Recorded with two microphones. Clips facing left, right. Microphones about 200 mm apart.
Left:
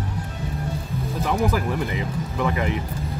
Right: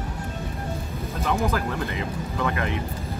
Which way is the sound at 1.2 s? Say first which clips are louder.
Left 2 dB; 15° left (ahead or behind).